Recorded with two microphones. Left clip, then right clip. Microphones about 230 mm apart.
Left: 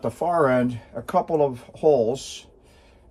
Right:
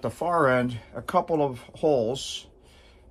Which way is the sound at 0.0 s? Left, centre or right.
Right.